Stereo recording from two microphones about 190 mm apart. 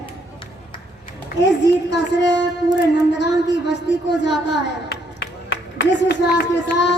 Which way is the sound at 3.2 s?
65° left (ahead or behind).